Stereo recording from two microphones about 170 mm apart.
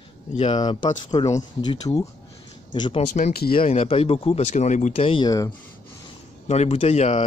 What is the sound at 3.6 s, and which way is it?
Speech, 35° left (ahead or behind).